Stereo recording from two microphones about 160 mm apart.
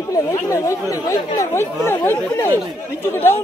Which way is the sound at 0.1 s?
20° left (ahead or behind).